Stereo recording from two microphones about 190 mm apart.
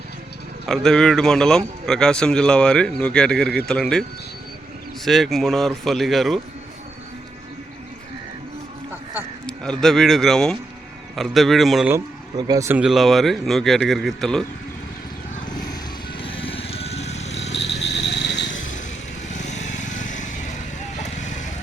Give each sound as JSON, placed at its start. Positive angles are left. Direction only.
{"t": 0.6, "sound": "speech", "side_deg": 0}
{"t": 5.0, "sound": "speech", "side_deg": 0}
{"t": 9.8, "sound": "speech", "side_deg": 0}
{"t": 11.9, "sound": "speech", "side_deg": -20}
{"t": 16.2, "sound": "vehicle", "side_deg": 30}
{"t": 17.5, "sound": "a sound", "side_deg": 65}
{"t": 19.3, "sound": "vehicle", "side_deg": 40}